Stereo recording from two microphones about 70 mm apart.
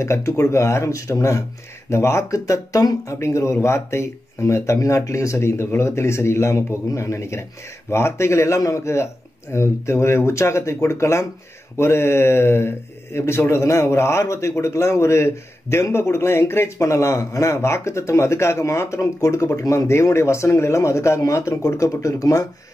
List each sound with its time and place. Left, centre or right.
0.0 s speech: left
19.9 s speech: left